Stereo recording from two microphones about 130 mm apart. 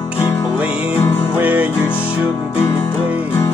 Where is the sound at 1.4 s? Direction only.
15° right (ahead or behind).